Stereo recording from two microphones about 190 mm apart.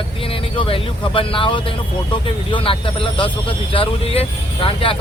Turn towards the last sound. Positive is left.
turn(degrees=30)  # may be behind; listen again after turning